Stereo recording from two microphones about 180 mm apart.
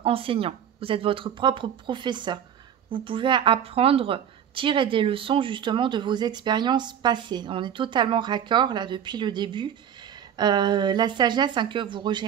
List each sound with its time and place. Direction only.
0.0 s a woman's voice: 30° right (ahead or behind)